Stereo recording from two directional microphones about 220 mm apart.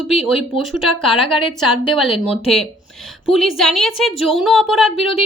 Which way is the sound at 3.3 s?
Centre (ahead or behind).